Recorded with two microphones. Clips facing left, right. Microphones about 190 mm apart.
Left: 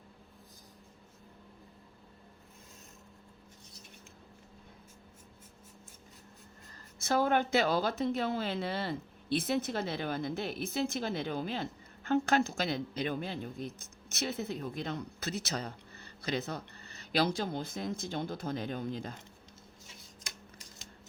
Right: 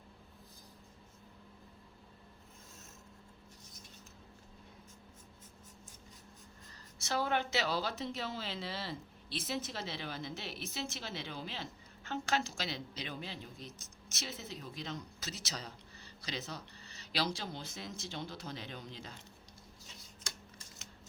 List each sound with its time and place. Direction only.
7.0 s speech: 50° left (ahead or behind)